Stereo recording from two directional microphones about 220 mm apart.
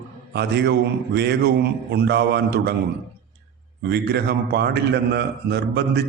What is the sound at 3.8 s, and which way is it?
A man's voice, 50° right (ahead or behind).